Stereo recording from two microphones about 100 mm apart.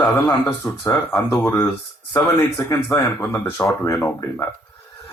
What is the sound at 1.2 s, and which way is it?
Speech, centre (ahead or behind).